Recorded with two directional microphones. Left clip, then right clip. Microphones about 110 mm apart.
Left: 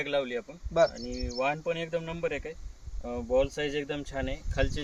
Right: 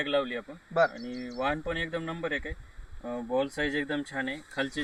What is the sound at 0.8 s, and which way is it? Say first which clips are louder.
Speech: left 1 dB; 20° left (ahead or behind).